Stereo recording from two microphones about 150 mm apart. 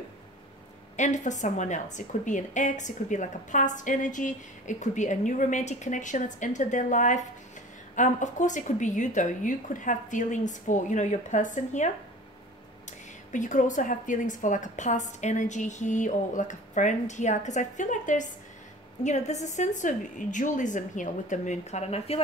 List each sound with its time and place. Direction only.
0.9 s a woman's voice: 55° left (ahead or behind)
13.3 s a woman's voice: 55° left (ahead or behind)